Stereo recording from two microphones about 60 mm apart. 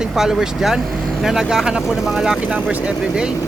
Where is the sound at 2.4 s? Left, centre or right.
Right.